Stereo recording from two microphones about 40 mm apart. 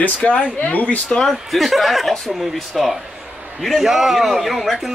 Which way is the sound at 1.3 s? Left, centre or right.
Centre.